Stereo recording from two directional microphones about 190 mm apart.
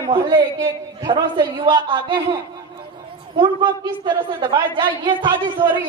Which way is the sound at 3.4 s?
25° right (ahead or behind).